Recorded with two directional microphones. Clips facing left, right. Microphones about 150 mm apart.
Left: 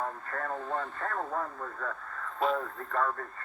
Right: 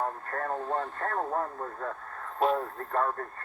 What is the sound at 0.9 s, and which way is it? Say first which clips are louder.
Speech: right 3 dB; 35° right (ahead or behind).